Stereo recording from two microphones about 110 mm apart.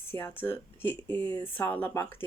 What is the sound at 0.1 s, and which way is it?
Speech, 20° left (ahead or behind).